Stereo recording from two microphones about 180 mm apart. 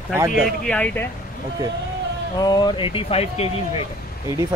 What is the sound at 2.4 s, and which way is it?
Speech, 25° left (ahead or behind).